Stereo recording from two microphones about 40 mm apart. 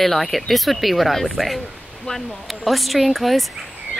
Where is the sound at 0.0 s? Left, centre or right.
Centre.